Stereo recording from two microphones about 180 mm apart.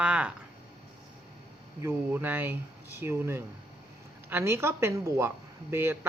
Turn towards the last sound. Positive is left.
turn(degrees=-15)  # may be behind; listen again after turning